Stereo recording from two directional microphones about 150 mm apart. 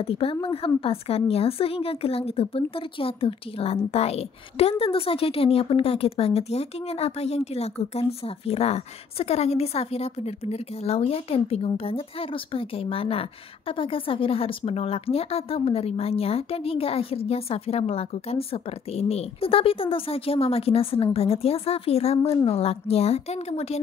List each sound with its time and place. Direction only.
0.0 s a woman's voice: 40° left (ahead or behind)